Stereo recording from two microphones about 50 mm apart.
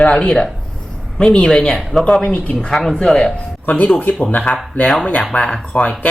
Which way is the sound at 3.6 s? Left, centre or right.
Left.